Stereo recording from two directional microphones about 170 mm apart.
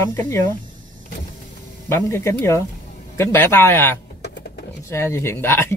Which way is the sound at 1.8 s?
15° left (ahead or behind).